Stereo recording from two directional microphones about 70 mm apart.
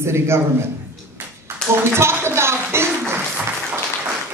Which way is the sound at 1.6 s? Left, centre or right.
Centre.